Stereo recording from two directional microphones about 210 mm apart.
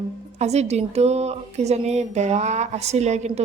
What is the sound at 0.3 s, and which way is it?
A woman's voice, 30° right (ahead or behind).